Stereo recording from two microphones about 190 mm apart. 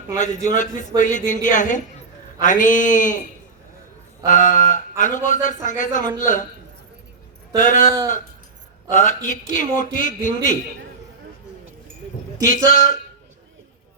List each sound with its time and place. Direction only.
0.2 s a man's voice: 40° left (ahead or behind)
4.3 s a man's voice: 45° left (ahead or behind)
7.5 s a man's voice: 40° left (ahead or behind)
12.6 s a man's voice: 40° left (ahead or behind)